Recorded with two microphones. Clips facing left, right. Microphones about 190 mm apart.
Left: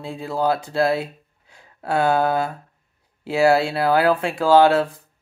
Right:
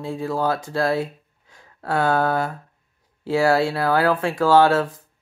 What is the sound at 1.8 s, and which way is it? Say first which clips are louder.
Speech: left 1 dB; 20° left (ahead or behind).